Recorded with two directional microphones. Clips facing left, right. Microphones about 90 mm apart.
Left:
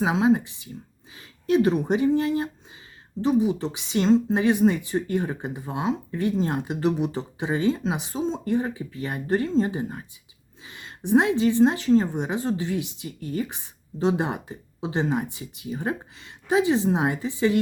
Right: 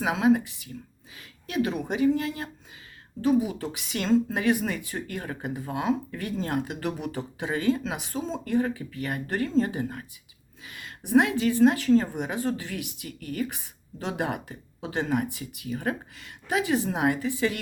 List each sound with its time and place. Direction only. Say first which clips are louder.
0.0 s speech: left 2 dB; 25° left (ahead or behind)